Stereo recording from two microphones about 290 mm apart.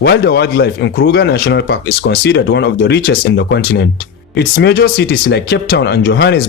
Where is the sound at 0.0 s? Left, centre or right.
Left.